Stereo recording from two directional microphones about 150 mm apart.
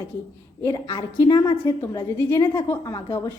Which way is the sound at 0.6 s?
20° left (ahead or behind).